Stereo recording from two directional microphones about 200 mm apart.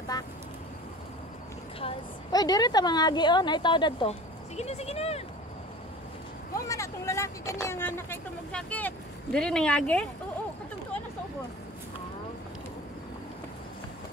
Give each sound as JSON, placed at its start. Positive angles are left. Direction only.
{"t": 0.1, "sound": "vehicle", "side_deg": 20}
{"t": 1.8, "sound": "a woman's voice", "side_deg": 25}
{"t": 6.5, "sound": "speech", "side_deg": 15}